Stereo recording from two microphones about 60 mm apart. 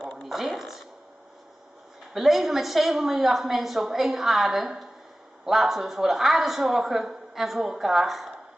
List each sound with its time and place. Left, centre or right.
0.2 s speech: centre
2.1 s a man's voice: centre